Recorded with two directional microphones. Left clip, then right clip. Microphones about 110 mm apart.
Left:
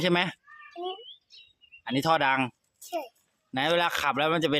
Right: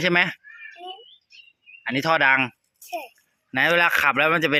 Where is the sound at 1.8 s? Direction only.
15° left (ahead or behind).